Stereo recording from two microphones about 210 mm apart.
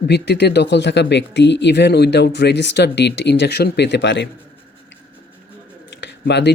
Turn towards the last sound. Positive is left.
turn(degrees=55)  # may be behind; listen again after turning